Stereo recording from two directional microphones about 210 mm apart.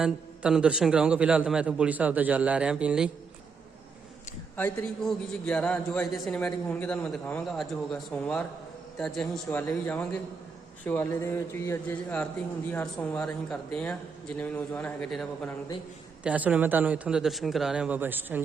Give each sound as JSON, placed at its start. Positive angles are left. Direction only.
{"t": 0.0, "sound": "a man's voice", "side_deg": -5}
{"t": 4.5, "sound": "a man's voice", "side_deg": 5}
{"t": 16.2, "sound": "speech", "side_deg": -5}